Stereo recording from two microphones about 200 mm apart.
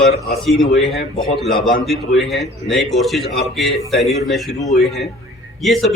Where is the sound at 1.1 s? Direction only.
Centre (ahead or behind).